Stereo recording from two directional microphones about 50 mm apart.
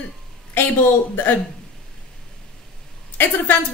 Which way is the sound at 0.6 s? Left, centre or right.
Left.